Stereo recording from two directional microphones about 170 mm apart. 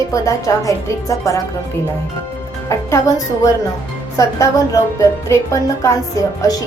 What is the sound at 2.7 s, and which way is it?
Speech, 20° left (ahead or behind).